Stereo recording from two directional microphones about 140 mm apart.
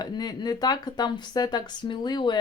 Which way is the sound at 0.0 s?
30° left (ahead or behind).